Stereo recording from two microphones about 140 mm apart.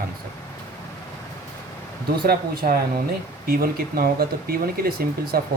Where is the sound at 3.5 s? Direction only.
90° right.